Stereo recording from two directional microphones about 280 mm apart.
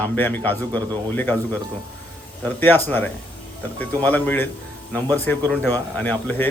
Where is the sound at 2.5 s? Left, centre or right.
Centre.